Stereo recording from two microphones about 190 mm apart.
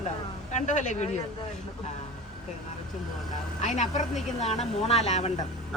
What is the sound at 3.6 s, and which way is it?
Speech, 40° left (ahead or behind).